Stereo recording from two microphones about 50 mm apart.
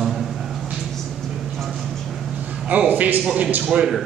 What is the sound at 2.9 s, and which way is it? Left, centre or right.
Speech, right.